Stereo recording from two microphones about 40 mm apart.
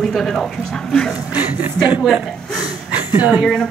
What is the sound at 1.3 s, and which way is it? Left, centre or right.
Speech, right.